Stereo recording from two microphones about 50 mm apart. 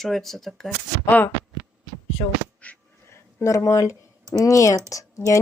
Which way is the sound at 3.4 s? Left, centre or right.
Left.